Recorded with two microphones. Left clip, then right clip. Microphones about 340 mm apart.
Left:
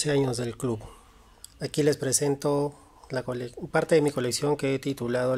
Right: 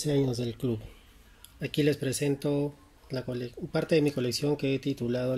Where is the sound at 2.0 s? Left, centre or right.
Centre.